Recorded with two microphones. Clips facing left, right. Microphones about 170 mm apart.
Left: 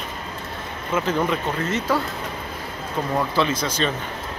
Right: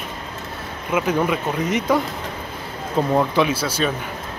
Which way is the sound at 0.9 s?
10° right (ahead or behind).